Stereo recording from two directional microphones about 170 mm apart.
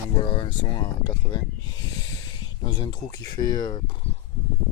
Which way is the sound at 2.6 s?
25° left (ahead or behind).